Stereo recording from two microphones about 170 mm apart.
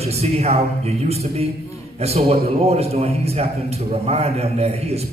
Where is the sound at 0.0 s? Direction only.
40° right (ahead or behind).